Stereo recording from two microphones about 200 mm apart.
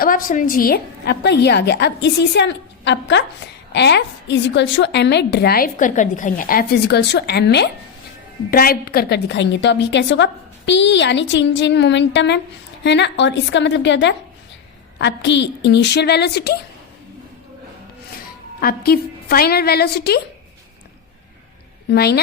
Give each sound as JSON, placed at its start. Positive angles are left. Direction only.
{"t": 0.0, "sound": "a woman's voice", "side_deg": 45}
{"t": 8.4, "sound": "a woman's voice", "side_deg": 45}
{"t": 18.6, "sound": "a woman's voice", "side_deg": 50}
{"t": 21.8, "sound": "a woman's voice", "side_deg": 55}